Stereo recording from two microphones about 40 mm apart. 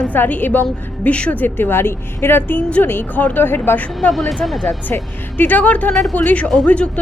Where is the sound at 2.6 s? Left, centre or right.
Left.